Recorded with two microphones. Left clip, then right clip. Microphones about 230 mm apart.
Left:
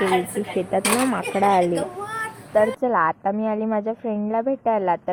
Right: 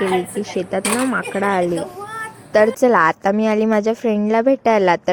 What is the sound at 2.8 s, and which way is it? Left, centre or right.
A woman's voice, right.